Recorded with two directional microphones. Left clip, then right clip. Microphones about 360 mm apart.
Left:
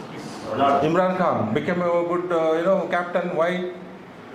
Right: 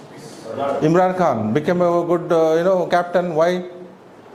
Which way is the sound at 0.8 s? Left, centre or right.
Right.